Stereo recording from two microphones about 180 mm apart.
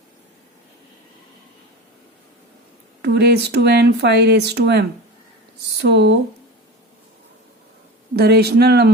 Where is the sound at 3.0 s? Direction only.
65° right (ahead or behind).